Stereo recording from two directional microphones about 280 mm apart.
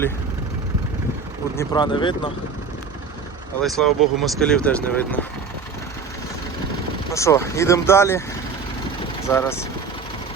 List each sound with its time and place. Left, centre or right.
1.5 s speech: centre
3.6 s speech: centre
7.1 s speech: centre
9.3 s speech: centre